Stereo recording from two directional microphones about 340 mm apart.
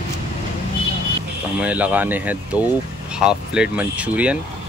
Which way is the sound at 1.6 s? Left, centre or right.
Centre.